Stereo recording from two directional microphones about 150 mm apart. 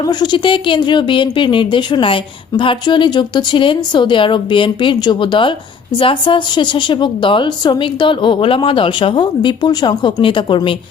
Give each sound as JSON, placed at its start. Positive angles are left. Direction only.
{"t": 0.0, "sound": "a woman's voice", "side_deg": 30}